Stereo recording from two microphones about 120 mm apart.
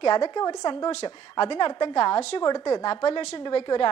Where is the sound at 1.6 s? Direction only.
40° left (ahead or behind).